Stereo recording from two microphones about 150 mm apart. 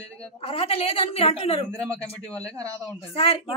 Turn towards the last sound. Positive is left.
turn(degrees=40)  # may be behind; listen again after turning